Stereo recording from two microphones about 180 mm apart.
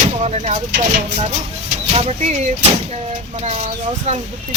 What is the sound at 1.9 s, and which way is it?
Speech, 35° right (ahead or behind).